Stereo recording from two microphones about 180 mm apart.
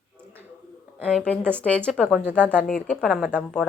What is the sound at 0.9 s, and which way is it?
A woman's voice, 5° left (ahead or behind).